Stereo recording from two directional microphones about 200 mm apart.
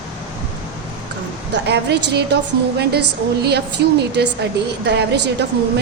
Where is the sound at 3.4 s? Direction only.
55° right (ahead or behind).